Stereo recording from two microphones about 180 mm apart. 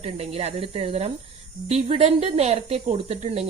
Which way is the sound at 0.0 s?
35° right (ahead or behind).